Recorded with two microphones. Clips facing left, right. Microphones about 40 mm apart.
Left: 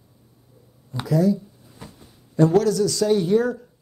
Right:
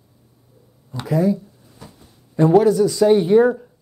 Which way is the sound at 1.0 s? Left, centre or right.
Right.